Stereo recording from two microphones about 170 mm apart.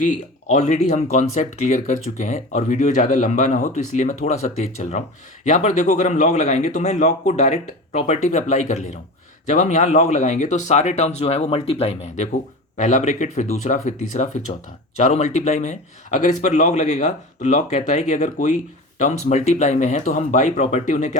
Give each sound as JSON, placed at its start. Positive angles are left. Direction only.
{"t": 0.0, "sound": "speech", "side_deg": 45}